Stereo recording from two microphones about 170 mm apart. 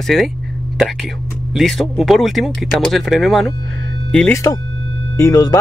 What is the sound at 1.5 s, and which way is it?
Speech, centre (ahead or behind).